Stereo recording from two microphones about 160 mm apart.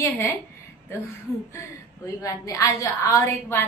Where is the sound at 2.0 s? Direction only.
20° left (ahead or behind).